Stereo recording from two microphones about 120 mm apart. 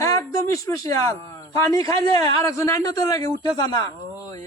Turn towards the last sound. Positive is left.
turn(degrees=25)  # may be behind; listen again after turning